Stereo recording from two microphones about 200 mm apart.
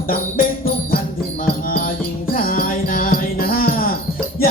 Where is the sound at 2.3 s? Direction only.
45° left (ahead or behind).